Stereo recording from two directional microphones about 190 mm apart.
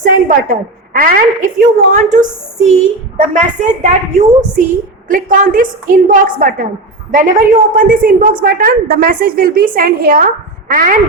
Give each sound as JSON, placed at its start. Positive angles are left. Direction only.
{"t": 0.0, "sound": "a woman's voice", "side_deg": -45}
{"t": 4.1, "sound": "a woman's voice", "side_deg": -40}